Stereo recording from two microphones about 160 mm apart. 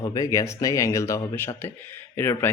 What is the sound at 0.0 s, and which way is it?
Speech, 25° left (ahead or behind).